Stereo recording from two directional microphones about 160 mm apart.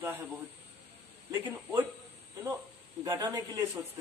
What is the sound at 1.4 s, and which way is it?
Speech, 15° right (ahead or behind).